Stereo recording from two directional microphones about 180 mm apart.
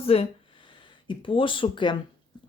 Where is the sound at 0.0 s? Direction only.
30° left (ahead or behind).